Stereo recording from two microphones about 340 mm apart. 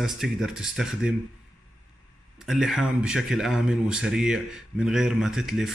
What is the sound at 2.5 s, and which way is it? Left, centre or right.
Speech, centre.